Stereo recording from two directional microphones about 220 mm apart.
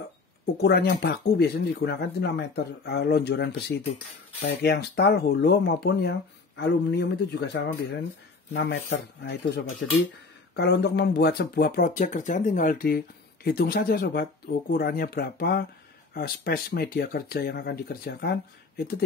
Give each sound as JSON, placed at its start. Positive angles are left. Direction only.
{"t": 0.6, "sound": "speech", "side_deg": 50}
{"t": 9.2, "sound": "speech", "side_deg": 45}